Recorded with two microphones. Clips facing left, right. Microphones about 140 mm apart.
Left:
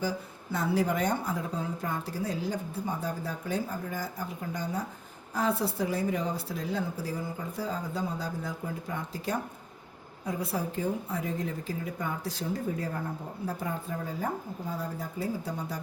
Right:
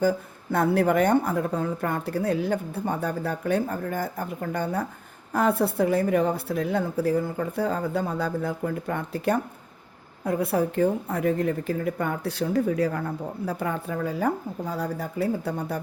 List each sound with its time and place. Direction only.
0.0 s speech: 55° right (ahead or behind)